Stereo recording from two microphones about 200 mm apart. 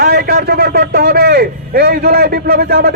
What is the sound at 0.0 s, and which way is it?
A man's voice, 50° right (ahead or behind).